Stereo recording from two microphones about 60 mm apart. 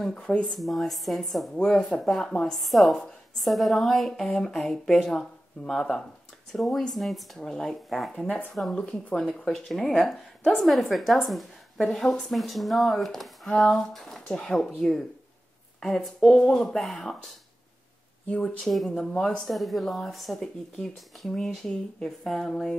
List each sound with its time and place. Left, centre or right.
0.1 s speech: centre
0.6 s speech: centre
13.5 s speech: centre
18.3 s speech: centre
18.7 s speech: centre